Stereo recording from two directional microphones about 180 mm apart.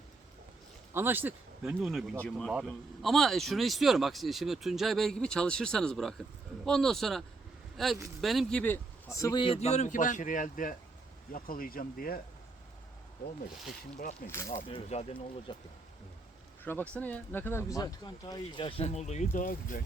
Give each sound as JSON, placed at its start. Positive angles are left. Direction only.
{"t": 0.9, "sound": "speech", "side_deg": -10}
{"t": 14.3, "sound": "speech", "side_deg": 15}
{"t": 14.7, "sound": "speech", "side_deg": 35}
{"t": 16.9, "sound": "speech", "side_deg": 10}